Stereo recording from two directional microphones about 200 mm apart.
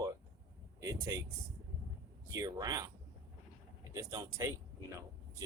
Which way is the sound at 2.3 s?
20° right (ahead or behind).